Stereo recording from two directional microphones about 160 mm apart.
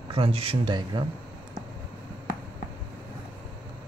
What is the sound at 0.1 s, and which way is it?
Speech, 35° right (ahead or behind).